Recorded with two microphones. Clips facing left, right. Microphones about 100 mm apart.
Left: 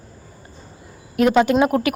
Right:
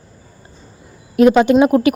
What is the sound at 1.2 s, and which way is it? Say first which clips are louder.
Speech: right 5 dB; 20° right (ahead or behind).